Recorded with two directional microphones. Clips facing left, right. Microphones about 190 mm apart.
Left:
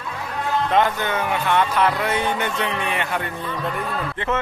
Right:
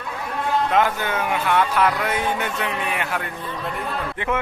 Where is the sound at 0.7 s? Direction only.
5° right (ahead or behind).